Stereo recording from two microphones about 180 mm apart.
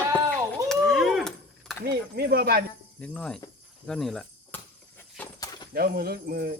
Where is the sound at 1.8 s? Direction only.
60° right (ahead or behind).